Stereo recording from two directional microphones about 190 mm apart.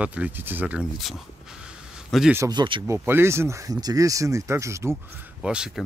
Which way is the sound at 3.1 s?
15° right (ahead or behind).